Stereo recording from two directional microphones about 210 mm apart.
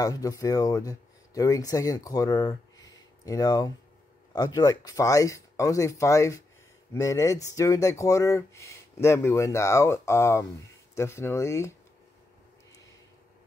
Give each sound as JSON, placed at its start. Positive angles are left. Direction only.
{"t": 0.0, "sound": "speech", "side_deg": 15}